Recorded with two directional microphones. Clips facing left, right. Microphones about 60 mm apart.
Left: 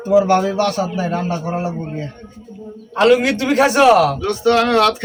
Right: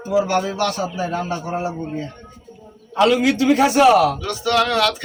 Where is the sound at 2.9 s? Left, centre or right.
Left.